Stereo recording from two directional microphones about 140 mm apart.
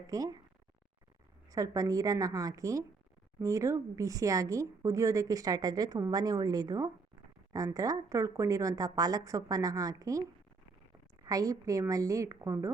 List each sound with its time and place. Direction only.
0.1 s speech: 25° right (ahead or behind)
1.5 s speech: 25° right (ahead or behind)
11.3 s speech: 25° right (ahead or behind)